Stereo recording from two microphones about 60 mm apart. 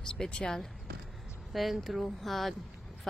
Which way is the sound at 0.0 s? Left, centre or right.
Centre.